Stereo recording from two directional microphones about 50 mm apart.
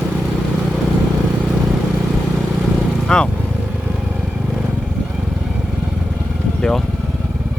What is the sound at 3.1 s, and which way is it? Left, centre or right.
Vehicle, centre.